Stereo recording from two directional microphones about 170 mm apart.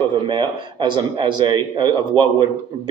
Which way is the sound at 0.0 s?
30° right (ahead or behind).